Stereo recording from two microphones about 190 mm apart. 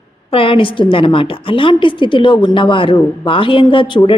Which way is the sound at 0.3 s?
30° left (ahead or behind).